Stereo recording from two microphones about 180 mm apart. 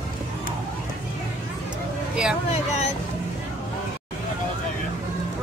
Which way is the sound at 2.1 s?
5° right (ahead or behind).